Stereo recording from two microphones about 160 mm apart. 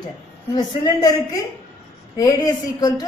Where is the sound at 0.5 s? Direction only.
25° left (ahead or behind).